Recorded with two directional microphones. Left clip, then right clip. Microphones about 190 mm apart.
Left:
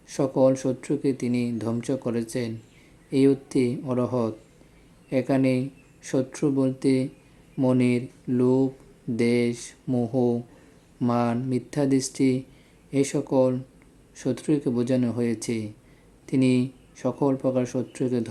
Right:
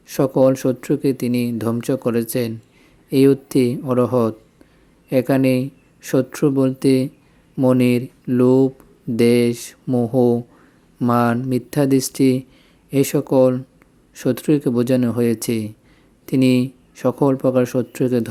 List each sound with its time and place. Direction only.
0.1 s speech: 35° right (ahead or behind)